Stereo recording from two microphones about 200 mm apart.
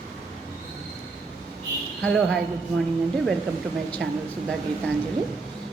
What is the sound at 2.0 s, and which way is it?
Speech, centre (ahead or behind).